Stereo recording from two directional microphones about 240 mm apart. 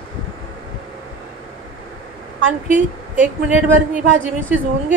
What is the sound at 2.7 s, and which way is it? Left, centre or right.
Speech, right.